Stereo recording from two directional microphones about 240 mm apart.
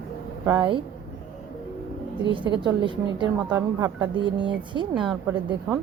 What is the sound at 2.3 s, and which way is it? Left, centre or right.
A woman's voice, centre.